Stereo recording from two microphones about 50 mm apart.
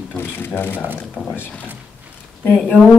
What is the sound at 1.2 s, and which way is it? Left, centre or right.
Speech, left.